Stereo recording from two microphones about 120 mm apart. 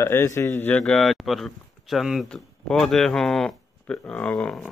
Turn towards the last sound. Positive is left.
turn(degrees=5)  # may be behind; listen again after turning